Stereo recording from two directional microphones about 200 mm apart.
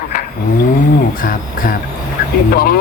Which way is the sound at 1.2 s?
45° left (ahead or behind).